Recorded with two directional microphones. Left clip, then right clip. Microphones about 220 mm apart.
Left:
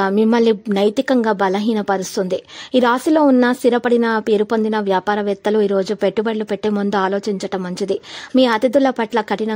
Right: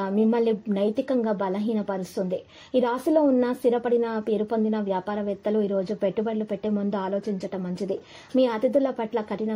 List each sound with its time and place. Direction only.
0.0 s a woman's voice: 35° left (ahead or behind)